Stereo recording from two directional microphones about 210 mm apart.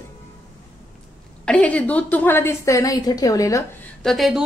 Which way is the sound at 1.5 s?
5° left (ahead or behind).